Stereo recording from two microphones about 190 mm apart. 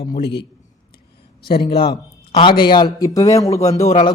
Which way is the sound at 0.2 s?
60° left (ahead or behind).